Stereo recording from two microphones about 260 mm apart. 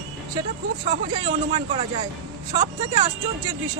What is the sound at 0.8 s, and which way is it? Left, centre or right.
Speech, centre.